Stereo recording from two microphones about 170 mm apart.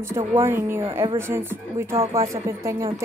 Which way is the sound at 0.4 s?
15° right (ahead or behind).